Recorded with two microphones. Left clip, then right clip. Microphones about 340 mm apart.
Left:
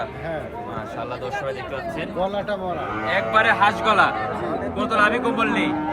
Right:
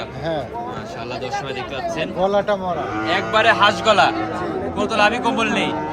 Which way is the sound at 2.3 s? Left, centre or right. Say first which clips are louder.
Right 8 dB; right.